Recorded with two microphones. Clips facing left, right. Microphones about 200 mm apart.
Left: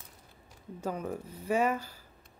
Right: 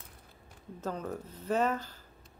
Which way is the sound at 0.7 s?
10° left (ahead or behind).